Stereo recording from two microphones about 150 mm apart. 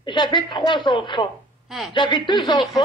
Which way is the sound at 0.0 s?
30° left (ahead or behind).